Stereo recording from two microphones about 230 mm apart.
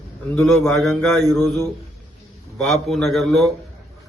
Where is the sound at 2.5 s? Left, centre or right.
Centre.